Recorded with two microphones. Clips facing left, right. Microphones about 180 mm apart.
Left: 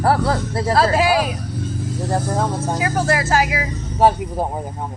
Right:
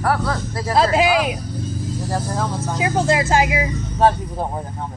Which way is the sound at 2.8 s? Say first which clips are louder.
Right 3 dB; 20° right (ahead or behind).